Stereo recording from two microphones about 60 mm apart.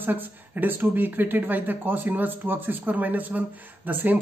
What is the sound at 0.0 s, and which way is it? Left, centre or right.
Speech, right.